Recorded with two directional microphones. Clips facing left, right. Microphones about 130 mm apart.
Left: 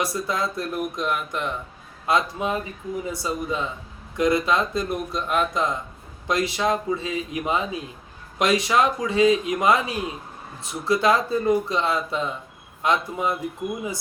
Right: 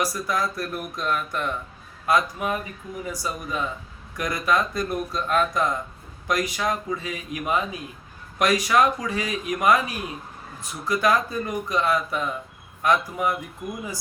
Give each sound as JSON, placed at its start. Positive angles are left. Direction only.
{"t": 0.0, "sound": "speech", "side_deg": 25}